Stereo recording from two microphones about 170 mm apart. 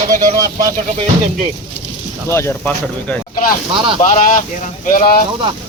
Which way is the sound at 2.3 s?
15° left (ahead or behind).